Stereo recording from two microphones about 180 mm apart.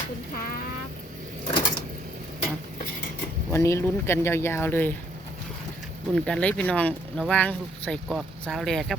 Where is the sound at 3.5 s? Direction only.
15° left (ahead or behind).